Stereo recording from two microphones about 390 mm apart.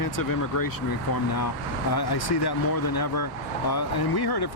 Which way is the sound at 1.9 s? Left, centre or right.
Left.